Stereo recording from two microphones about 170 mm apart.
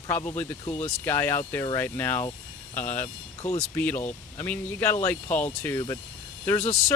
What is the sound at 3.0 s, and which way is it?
Speech, 40° left (ahead or behind).